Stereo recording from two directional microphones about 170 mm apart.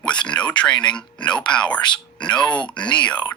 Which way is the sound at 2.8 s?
5° left (ahead or behind).